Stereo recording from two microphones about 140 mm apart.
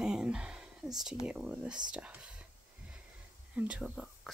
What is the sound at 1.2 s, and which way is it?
Speech, 10° right (ahead or behind).